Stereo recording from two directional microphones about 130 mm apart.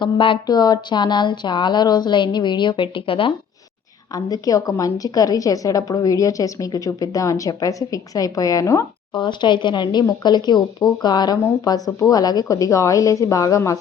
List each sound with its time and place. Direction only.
0.0 s speech: 40° left (ahead or behind)
4.1 s a woman's voice: 30° left (ahead or behind)
9.1 s a woman's voice: 35° left (ahead or behind)